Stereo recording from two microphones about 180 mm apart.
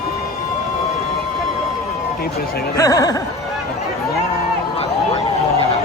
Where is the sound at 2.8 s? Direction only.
20° left (ahead or behind).